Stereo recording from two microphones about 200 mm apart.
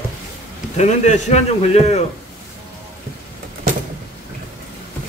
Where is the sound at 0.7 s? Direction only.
35° left (ahead or behind).